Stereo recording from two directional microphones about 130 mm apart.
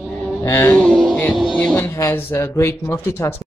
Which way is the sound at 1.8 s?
20° left (ahead or behind).